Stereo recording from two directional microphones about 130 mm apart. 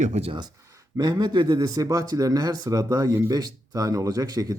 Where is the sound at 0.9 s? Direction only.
30° right (ahead or behind).